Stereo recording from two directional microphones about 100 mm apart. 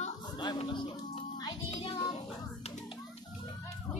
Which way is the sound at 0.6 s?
50° left (ahead or behind).